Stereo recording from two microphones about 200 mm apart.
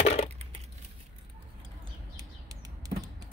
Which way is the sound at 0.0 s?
30° left (ahead or behind).